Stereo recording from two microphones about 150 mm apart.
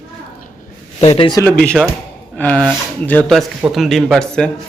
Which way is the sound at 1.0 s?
45° left (ahead or behind).